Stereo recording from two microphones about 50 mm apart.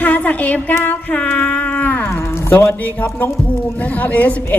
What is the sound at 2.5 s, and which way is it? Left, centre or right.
A woman's voice, left.